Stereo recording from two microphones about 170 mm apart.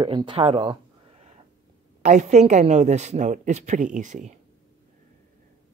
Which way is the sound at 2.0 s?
45° right (ahead or behind).